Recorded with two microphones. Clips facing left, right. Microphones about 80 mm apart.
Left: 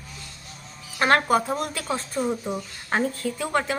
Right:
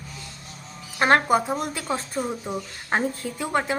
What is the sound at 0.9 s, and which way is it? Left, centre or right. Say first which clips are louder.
A woman's voice: right 1 dB; right.